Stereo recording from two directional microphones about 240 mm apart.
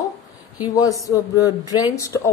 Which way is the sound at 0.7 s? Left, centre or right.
Centre.